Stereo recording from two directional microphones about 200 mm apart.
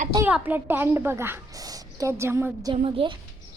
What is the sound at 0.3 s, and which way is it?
A woman's voice, 10° right (ahead or behind).